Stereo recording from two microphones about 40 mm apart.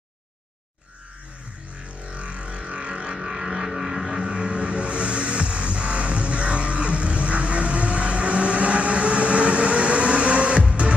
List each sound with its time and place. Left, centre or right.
2.0 s vehicle: right
3.2 s vehicle: centre; by 11.0 s right